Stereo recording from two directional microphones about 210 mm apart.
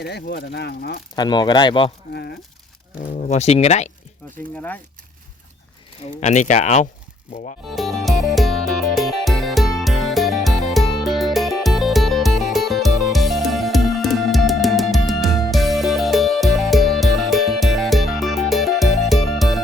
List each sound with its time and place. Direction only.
0.0 s speech: 50° left (ahead or behind)
1.1 s speech: 20° left (ahead or behind)
2.1 s speech: 50° left (ahead or behind)
3.0 s speech: 35° left (ahead or behind)
4.5 s speech: 5° left (ahead or behind)
6.1 s speech: 35° left (ahead or behind)
7.7 s music: centre (ahead or behind)